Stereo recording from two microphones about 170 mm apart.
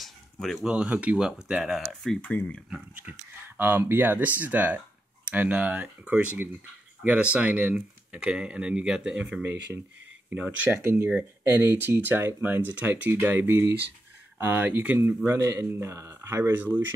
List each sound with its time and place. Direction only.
0.0 s speech: centre (ahead or behind)
2.7 s speech: 10° right (ahead or behind)